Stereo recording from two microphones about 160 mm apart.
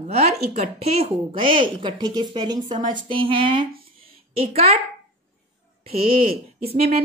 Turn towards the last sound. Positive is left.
turn(degrees=-40)  # may be behind; listen again after turning